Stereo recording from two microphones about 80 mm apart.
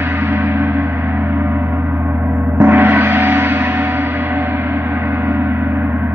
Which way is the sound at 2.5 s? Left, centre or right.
Right.